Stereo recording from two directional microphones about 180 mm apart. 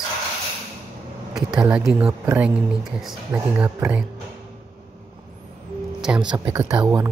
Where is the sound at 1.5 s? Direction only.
5° right (ahead or behind).